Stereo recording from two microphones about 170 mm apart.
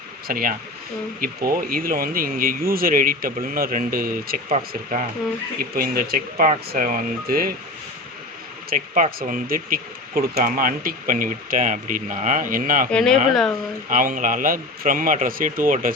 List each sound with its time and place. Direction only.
0.3 s speech: 55° right (ahead or behind)
4.7 s speech: 45° right (ahead or behind)
5.7 s speech: 60° right (ahead or behind)
6.3 s speech: 50° right (ahead or behind)
8.7 s speech: 55° right (ahead or behind)
12.9 s speech: 5° left (ahead or behind)
13.9 s speech: 55° right (ahead or behind)